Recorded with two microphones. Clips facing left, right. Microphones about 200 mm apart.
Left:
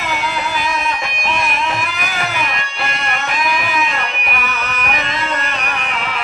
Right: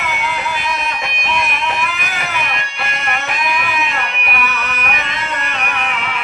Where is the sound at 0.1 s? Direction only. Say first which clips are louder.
Left 3 dB; 35° left (ahead or behind).